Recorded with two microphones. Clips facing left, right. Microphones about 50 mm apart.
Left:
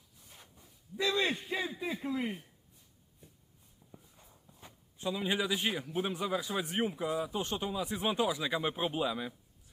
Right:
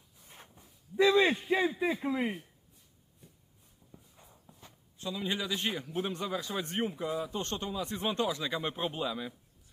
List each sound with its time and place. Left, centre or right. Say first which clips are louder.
0.2 s a sound: right 3 dB; right
0.9 s a man's voice: right 7 dB; centre
4.2 s walk: right 3 dB; centre
4.6 s a man's voice: left 3 dB; centre